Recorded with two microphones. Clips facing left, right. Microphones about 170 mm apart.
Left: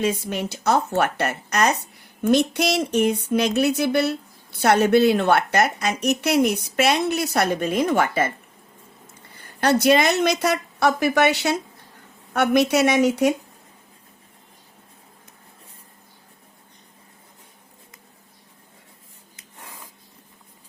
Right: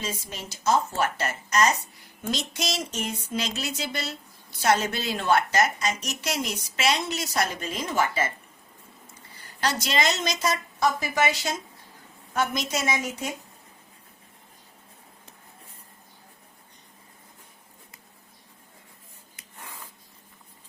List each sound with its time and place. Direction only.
0.0 s speech: 65° left (ahead or behind)
9.3 s a woman's voice: 55° left (ahead or behind); by 13.3 s 75° left (ahead or behind)